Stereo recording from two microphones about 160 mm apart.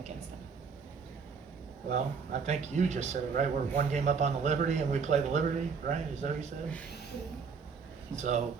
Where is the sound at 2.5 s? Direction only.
45° right (ahead or behind).